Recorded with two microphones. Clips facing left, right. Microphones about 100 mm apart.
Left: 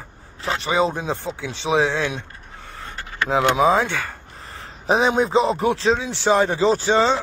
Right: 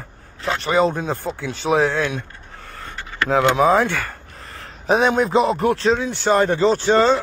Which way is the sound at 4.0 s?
Centre (ahead or behind).